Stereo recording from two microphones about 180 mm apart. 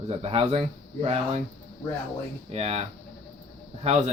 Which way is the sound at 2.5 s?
35° right (ahead or behind).